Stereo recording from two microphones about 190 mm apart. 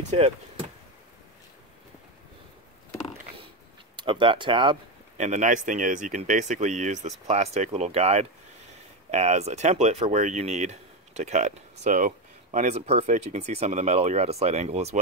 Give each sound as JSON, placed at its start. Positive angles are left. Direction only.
{"t": 3.9, "sound": "speech", "side_deg": -25}
{"t": 5.2, "sound": "speech", "side_deg": -40}